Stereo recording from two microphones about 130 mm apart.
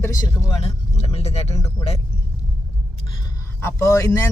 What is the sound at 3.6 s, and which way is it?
Speech, 25° left (ahead or behind).